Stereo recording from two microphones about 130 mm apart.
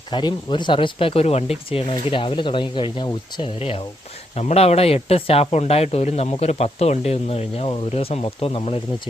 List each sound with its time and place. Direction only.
0.1 s speech: 35° left (ahead or behind)